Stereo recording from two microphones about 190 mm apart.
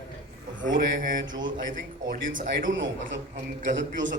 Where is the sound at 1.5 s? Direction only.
45° right (ahead or behind).